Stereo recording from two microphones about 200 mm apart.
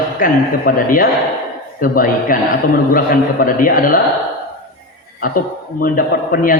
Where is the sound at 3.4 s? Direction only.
45° left (ahead or behind).